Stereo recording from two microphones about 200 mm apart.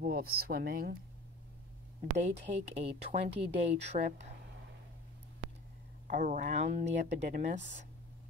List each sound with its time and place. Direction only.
0.0 s speech: 50° right (ahead or behind)
2.1 s speech: 35° right (ahead or behind)
6.0 s speech: 40° right (ahead or behind)